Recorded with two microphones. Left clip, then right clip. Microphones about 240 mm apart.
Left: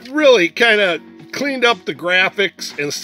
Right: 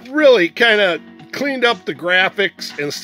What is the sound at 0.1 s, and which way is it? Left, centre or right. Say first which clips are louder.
Speech: even; centre.